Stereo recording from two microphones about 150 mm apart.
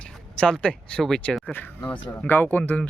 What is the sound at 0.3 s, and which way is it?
Speech, 5° left (ahead or behind).